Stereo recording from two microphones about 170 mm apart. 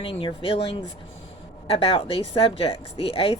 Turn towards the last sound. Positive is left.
turn(degrees=30)  # may be behind; listen again after turning